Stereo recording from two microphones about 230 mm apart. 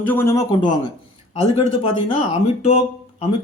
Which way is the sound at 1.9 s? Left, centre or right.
Left.